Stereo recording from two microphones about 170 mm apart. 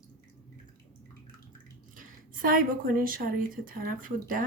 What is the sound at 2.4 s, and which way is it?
A woman's voice, 55° right (ahead or behind).